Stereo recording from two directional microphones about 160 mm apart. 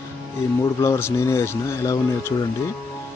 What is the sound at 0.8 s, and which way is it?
Speech, 15° left (ahead or behind).